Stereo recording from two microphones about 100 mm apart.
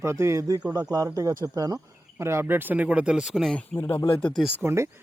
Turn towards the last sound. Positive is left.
turn(degrees=-30)  # may be behind; listen again after turning